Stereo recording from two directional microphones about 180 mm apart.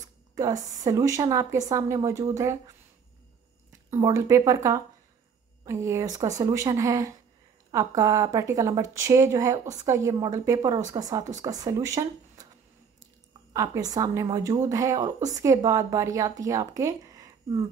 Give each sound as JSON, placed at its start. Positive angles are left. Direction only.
{"t": 0.0, "sound": "a woman's voice", "side_deg": -20}
{"t": 3.9, "sound": "a woman's voice", "side_deg": -15}
{"t": 13.5, "sound": "a woman's voice", "side_deg": -20}